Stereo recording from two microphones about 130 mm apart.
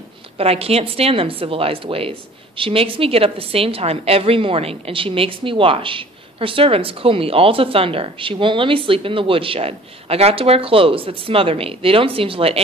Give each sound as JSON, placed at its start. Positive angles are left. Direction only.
{"t": 0.4, "sound": "a woman's voice", "side_deg": -50}